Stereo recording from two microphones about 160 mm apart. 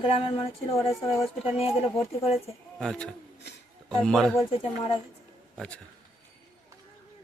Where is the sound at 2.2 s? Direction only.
40° left (ahead or behind).